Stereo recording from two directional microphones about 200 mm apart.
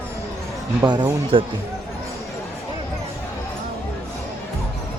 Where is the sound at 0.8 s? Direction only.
20° right (ahead or behind).